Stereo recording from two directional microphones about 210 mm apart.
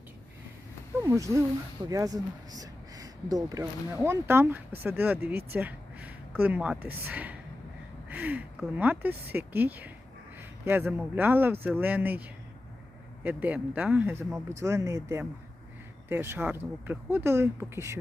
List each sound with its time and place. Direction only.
1.0 s speech: 15° right (ahead or behind)
5.3 s speech: 50° right (ahead or behind)
5.5 s speech: 5° right (ahead or behind)
13.2 s speech: 5° right (ahead or behind)